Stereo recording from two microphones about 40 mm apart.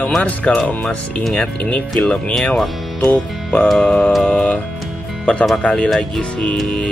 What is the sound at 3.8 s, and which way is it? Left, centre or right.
Speech, left.